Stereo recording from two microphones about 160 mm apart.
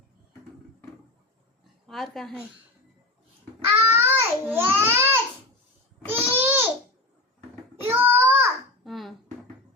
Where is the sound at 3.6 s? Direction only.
15° right (ahead or behind).